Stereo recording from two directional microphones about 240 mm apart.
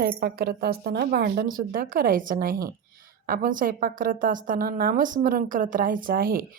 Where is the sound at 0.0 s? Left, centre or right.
Right.